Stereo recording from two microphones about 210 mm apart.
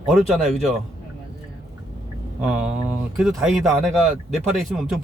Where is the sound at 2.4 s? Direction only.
5° right (ahead or behind).